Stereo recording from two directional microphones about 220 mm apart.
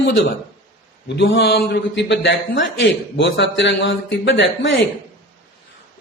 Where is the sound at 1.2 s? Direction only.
55° left (ahead or behind).